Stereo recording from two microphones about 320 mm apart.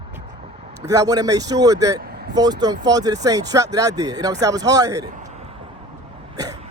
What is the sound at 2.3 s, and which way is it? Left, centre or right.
Speech, centre.